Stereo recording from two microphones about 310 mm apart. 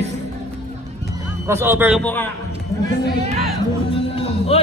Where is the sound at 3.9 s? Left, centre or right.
Centre.